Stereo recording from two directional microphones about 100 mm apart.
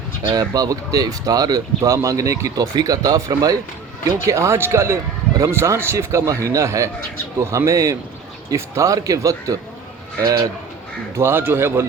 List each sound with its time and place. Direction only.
0.3 s speech: 35° right (ahead or behind)
11.2 s speech: 20° right (ahead or behind)